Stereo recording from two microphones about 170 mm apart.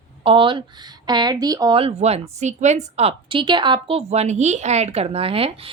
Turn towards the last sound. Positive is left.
turn(degrees=-35)  # may be behind; listen again after turning